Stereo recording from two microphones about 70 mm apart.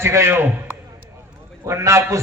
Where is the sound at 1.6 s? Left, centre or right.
Right.